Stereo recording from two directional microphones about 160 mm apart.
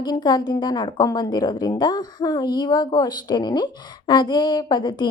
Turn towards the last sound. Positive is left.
turn(degrees=25)  # may be behind; listen again after turning